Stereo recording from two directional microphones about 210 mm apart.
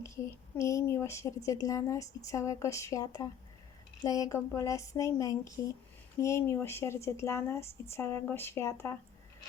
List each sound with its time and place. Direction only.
0.5 s speech: 15° left (ahead or behind)